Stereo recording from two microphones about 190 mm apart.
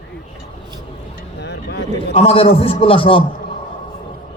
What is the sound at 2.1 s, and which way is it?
A man's voice, 30° left (ahead or behind).